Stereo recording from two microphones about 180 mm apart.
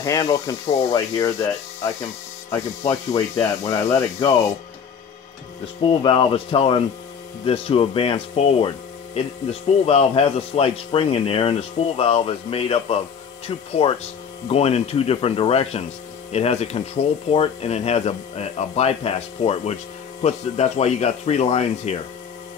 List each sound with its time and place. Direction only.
0.0 s speech: 20° left (ahead or behind)
2.9 s speech: 15° left (ahead or behind)
5.8 s speech: 30° left (ahead or behind)